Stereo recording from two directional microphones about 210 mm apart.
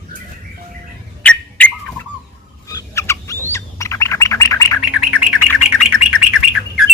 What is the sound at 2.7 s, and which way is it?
Bird, 15° left (ahead or behind).